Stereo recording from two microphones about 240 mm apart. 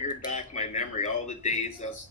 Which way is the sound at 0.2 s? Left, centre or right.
Left.